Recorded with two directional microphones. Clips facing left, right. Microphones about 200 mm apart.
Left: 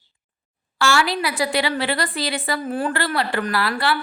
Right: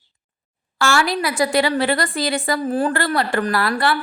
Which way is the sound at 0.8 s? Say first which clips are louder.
Right 1 dB; 45° right (ahead or behind).